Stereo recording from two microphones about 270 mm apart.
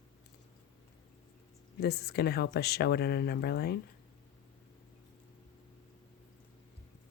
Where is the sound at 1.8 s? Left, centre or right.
Left.